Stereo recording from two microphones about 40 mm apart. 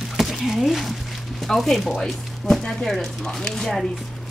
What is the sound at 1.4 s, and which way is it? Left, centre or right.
Speech, centre.